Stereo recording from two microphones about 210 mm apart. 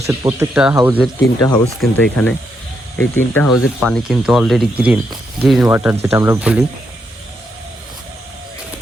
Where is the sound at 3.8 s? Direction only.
Centre (ahead or behind).